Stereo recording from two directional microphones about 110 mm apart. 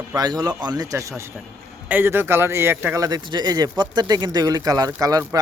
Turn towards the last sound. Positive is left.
turn(degrees=-35)  # may be behind; listen again after turning